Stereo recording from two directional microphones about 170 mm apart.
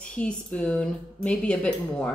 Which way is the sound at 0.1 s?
5° left (ahead or behind).